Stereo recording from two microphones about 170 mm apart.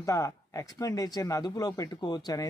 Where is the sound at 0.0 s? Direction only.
20° left (ahead or behind).